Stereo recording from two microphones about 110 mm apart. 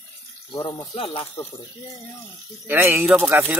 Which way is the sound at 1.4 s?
20° left (ahead or behind).